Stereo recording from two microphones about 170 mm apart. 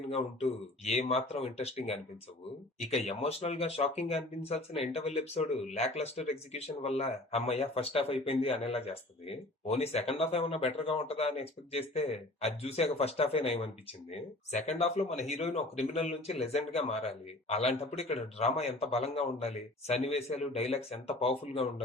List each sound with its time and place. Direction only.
0.9 s speech: 35° left (ahead or behind)